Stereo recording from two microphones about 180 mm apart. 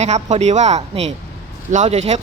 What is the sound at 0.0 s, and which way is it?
Speech, 40° right (ahead or behind).